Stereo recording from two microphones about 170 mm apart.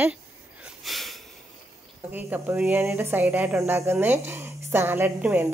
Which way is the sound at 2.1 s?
10° right (ahead or behind).